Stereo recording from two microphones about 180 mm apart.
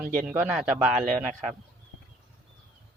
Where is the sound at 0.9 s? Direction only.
40° right (ahead or behind).